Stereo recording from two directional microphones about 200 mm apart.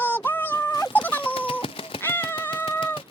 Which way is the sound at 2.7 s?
25° left (ahead or behind).